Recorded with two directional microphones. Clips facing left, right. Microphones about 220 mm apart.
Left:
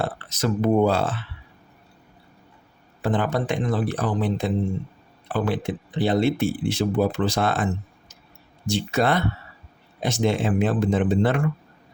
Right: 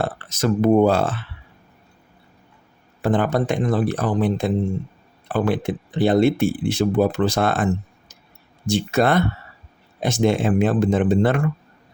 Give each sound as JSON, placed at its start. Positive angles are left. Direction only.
{"t": 0.0, "sound": "speech", "side_deg": -45}
{"t": 3.0, "sound": "speech", "side_deg": -45}